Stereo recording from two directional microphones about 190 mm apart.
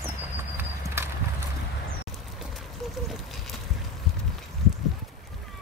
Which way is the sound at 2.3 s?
Centre (ahead or behind).